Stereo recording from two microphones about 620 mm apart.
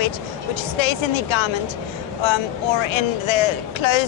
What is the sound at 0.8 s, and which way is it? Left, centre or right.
Speech, left.